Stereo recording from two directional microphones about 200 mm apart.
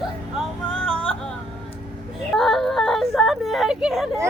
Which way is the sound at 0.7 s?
5° left (ahead or behind).